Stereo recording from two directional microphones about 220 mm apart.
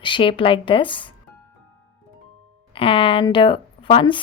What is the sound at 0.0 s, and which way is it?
A woman's voice, 20° left (ahead or behind).